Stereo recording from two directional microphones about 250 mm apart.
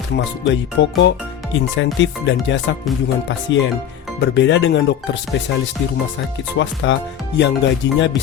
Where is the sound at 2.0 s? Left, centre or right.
Left.